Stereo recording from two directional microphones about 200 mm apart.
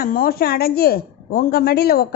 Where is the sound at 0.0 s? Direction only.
45° left (ahead or behind).